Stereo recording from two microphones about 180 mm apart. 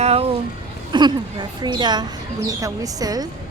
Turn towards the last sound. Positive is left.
turn(degrees=-20)  # may be behind; listen again after turning